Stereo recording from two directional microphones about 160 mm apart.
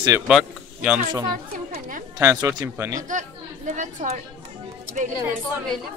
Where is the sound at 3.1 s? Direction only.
50° right (ahead or behind).